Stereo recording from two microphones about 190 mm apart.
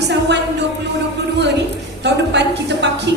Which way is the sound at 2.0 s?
65° right (ahead or behind).